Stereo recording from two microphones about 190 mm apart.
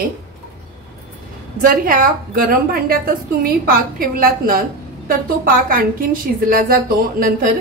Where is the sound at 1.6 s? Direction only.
50° right (ahead or behind).